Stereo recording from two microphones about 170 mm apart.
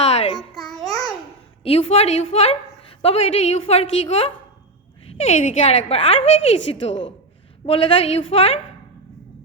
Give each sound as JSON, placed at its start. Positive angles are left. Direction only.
{"t": 0.0, "sound": "babbling", "side_deg": 35}
{"t": 0.8, "sound": "babbling", "side_deg": 0}
{"t": 1.6, "sound": "a woman's voice", "side_deg": 35}
{"t": 7.7, "sound": "a woman's voice", "side_deg": 30}